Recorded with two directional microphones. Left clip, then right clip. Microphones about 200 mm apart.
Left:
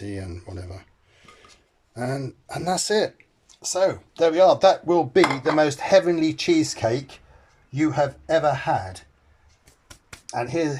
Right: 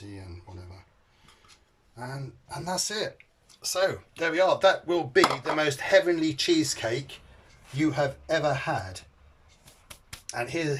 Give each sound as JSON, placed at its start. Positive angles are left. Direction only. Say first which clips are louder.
{"t": 0.0, "sound": "speech", "louder": "left 11 dB", "side_deg": 50}
{"t": 2.0, "sound": "speech", "louder": "left 11 dB", "side_deg": 50}
{"t": 3.7, "sound": "speech", "louder": "left 5 dB", "side_deg": 25}
{"t": 10.1, "sound": "a sound", "louder": "left 5 dB", "side_deg": 20}